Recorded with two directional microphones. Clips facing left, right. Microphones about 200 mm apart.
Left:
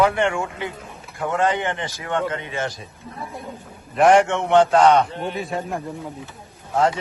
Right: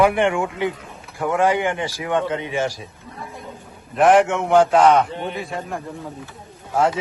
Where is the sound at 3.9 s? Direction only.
Centre (ahead or behind).